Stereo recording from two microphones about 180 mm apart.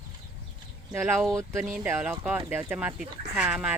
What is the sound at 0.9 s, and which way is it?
Speech, 15° right (ahead or behind).